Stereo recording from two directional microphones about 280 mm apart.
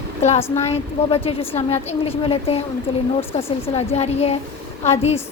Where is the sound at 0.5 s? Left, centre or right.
Left.